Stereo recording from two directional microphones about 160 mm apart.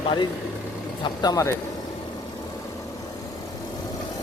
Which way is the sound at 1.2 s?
20° left (ahead or behind).